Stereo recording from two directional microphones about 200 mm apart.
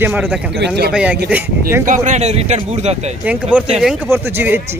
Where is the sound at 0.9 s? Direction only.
5° right (ahead or behind).